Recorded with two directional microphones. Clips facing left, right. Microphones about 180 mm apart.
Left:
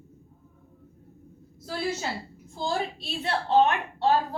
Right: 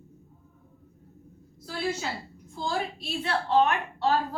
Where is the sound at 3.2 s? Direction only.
30° left (ahead or behind).